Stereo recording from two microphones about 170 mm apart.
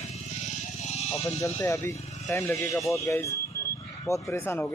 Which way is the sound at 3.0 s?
20° left (ahead or behind).